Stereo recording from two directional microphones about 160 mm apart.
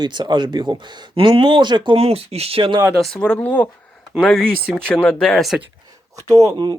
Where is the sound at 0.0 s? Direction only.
30° right (ahead or behind).